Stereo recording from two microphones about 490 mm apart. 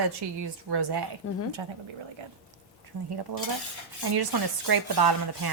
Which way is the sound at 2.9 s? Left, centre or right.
Right.